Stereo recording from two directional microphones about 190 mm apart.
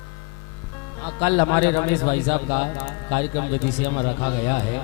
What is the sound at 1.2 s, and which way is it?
A man's voice, 25° left (ahead or behind).